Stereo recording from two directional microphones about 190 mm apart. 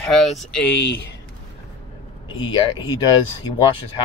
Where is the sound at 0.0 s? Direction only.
Centre (ahead or behind).